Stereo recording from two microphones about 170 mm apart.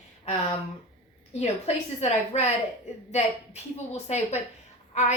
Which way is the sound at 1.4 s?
40° left (ahead or behind).